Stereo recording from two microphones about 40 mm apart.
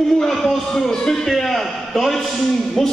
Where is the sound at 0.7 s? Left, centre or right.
Centre.